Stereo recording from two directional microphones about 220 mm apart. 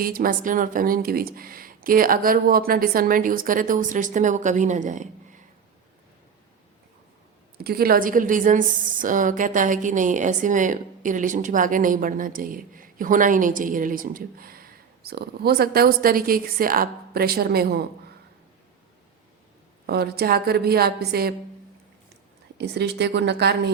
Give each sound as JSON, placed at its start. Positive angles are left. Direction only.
{"t": 0.0, "sound": "a woman's voice", "side_deg": -40}
{"t": 7.6, "sound": "a woman's voice", "side_deg": -45}
{"t": 19.9, "sound": "a woman's voice", "side_deg": -45}
{"t": 22.5, "sound": "a woman's voice", "side_deg": -50}